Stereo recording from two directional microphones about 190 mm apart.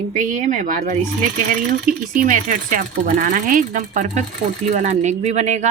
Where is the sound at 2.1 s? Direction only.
45° right (ahead or behind).